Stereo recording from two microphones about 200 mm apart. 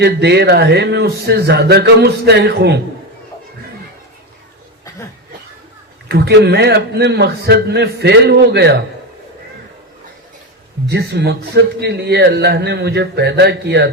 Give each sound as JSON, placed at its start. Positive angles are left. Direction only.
{"t": 0.0, "sound": "a man's voice", "side_deg": -55}
{"t": 6.1, "sound": "a man's voice", "side_deg": -55}
{"t": 10.8, "sound": "a man's voice", "side_deg": -55}